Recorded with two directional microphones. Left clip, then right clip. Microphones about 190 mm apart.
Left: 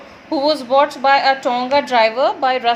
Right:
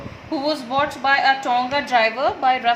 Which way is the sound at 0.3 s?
50° left (ahead or behind).